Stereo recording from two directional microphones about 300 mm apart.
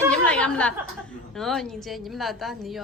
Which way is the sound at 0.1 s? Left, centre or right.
Centre.